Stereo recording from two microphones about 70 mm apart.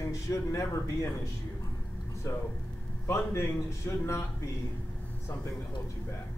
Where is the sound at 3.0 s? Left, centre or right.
Left.